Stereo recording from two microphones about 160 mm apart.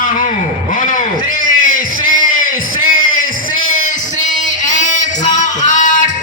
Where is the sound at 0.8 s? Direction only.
55° left (ahead or behind).